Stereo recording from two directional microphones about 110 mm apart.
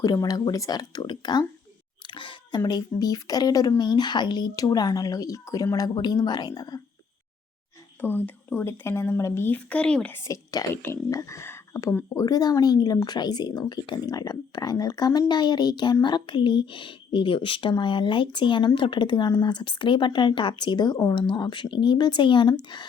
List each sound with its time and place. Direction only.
0.0 s speech: 35° left (ahead or behind)
2.1 s chewing: 50° left (ahead or behind)
2.6 s speech: 35° left (ahead or behind)
8.0 s speech: 20° left (ahead or behind)
10.2 s speech: 30° left (ahead or behind)
12.1 s speech: 35° left (ahead or behind)